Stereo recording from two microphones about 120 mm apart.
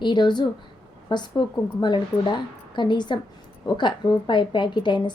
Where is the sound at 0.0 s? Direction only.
40° left (ahead or behind).